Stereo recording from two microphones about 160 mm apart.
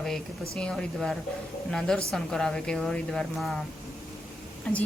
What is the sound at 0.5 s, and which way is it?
Speech, 5° left (ahead or behind).